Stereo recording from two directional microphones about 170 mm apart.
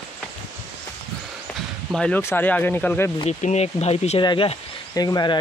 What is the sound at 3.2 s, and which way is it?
Speech, 40° left (ahead or behind).